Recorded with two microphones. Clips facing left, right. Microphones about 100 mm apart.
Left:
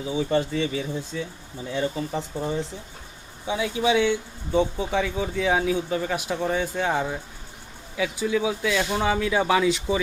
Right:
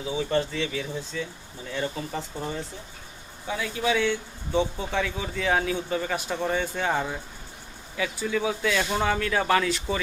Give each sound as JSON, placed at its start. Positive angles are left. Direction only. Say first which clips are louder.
{"t": 0.2, "sound": "speech", "louder": "left 3 dB", "side_deg": 15}